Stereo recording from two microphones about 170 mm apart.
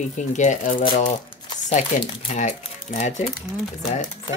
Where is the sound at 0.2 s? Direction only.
45° left (ahead or behind).